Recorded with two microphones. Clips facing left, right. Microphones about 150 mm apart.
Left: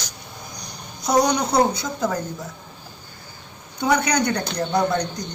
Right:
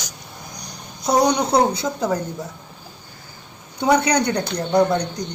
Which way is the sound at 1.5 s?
30° right (ahead or behind).